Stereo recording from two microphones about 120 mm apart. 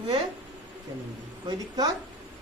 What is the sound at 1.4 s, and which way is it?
Speech, 35° right (ahead or behind).